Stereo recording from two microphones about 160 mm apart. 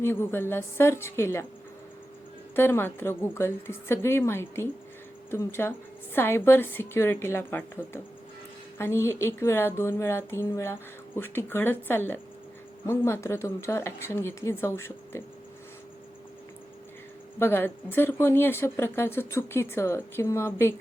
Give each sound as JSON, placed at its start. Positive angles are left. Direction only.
{"t": 0.0, "sound": "speech", "side_deg": 15}
{"t": 2.6, "sound": "speech", "side_deg": 15}
{"t": 17.4, "sound": "speech", "side_deg": 15}